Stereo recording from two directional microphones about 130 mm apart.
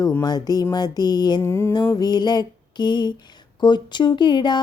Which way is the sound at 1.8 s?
30° left (ahead or behind).